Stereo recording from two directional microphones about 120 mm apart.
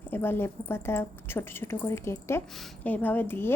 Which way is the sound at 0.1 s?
20° left (ahead or behind).